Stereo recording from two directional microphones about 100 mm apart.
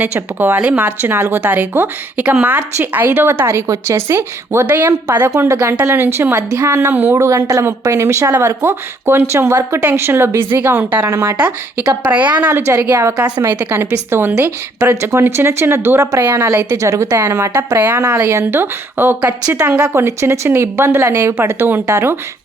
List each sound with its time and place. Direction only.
0.1 s a woman's voice: 20° right (ahead or behind)
5.3 s a woman's voice: 30° right (ahead or behind)
11.3 s a woman's voice: 15° right (ahead or behind)
18.1 s a woman's voice: 30° right (ahead or behind); by 19.9 s 10° right (ahead or behind)
19.9 s a woman's voice: 25° right (ahead or behind)